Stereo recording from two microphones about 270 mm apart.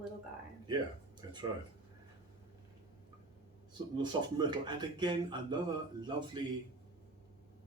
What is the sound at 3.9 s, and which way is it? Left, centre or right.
Speech, centre.